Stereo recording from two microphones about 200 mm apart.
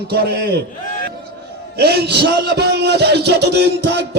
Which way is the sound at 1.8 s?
55° right (ahead or behind).